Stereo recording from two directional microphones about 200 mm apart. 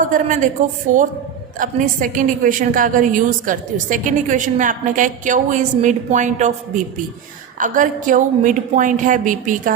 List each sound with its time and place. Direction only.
0.0 s a woman's voice: 40° right (ahead or behind)